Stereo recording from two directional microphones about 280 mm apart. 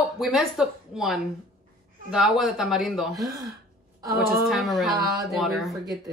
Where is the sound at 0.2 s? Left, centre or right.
Centre.